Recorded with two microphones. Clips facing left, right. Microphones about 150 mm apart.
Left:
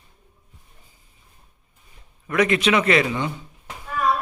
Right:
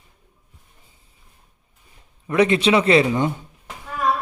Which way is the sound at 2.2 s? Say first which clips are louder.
Right 3 dB; 30° right (ahead or behind).